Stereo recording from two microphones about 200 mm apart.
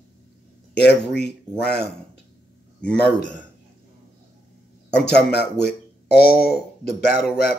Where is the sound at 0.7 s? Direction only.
60° left (ahead or behind).